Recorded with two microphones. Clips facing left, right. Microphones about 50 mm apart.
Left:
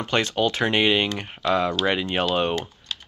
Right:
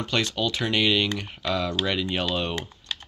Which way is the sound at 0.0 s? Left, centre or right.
Left.